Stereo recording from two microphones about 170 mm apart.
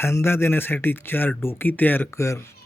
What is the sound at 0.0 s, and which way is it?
Speech, 15° left (ahead or behind).